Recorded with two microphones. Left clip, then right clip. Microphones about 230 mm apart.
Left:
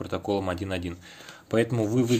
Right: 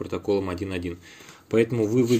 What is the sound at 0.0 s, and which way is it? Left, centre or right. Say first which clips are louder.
A man's voice: right 2 dB; centre.